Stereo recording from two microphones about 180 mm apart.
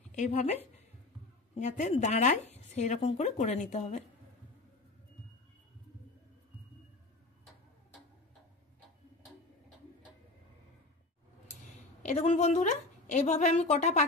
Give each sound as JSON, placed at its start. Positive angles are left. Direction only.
{"t": 0.1, "sound": "speech", "side_deg": 40}
{"t": 12.0, "sound": "a woman's voice", "side_deg": 35}